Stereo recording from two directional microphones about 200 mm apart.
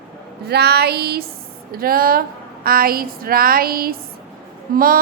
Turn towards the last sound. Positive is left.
turn(degrees=-45)  # may be behind; listen again after turning